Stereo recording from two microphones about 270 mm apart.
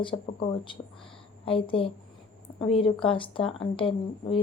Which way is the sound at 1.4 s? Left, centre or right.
Centre.